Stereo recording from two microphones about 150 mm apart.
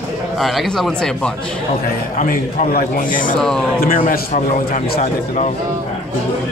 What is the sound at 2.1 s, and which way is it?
A man's voice, 70° left (ahead or behind).